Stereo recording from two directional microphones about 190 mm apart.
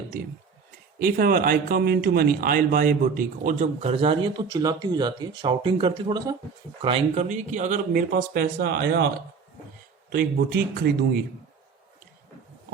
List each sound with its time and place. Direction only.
0.9 s speech: 50° right (ahead or behind); by 6.3 s 25° right (ahead or behind)
6.8 s speech: 35° right (ahead or behind); by 9.0 s 60° right (ahead or behind)
10.1 s speech: 55° right (ahead or behind)